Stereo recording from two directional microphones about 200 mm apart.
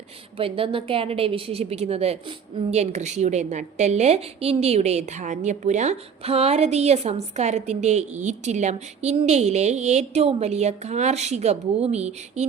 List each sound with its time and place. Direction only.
0.3 s a woman's voice: 25° right (ahead or behind)